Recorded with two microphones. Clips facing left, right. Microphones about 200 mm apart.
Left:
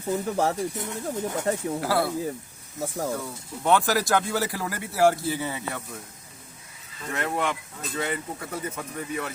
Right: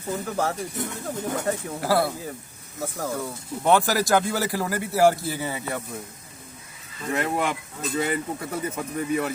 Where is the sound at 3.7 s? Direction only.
5° right (ahead or behind).